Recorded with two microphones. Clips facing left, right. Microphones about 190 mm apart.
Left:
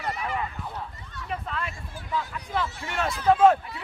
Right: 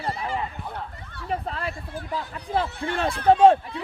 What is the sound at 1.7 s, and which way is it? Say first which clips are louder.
Speech: right 6 dB; 55° right (ahead or behind).